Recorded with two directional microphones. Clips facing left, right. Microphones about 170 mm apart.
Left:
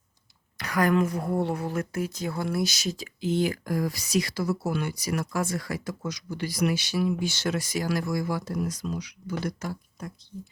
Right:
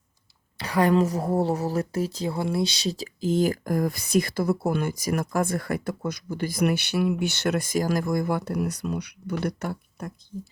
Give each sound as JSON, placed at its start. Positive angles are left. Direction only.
{"t": 0.6, "sound": "a woman's voice", "side_deg": -30}